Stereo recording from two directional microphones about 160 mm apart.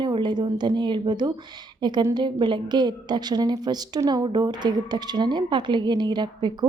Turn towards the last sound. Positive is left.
turn(degrees=-25)  # may be behind; listen again after turning